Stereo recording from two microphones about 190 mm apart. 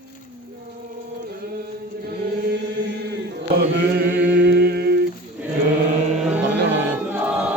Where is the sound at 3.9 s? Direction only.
60° right (ahead or behind).